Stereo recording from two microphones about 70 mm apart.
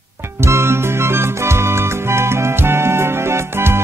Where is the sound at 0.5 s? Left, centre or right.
Right.